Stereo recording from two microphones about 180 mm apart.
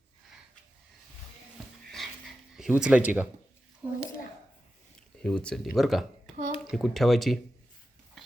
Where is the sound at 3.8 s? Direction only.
10° right (ahead or behind).